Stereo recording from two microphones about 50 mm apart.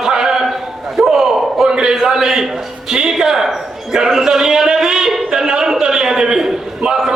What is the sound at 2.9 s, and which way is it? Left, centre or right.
Music, centre.